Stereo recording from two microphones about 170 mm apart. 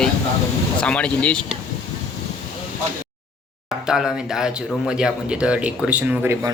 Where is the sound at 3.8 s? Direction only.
5° right (ahead or behind).